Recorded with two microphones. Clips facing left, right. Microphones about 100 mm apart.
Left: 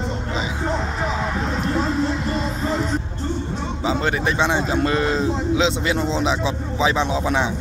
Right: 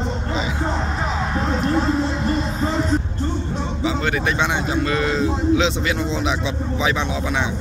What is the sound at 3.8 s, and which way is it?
Speech, 30° left (ahead or behind).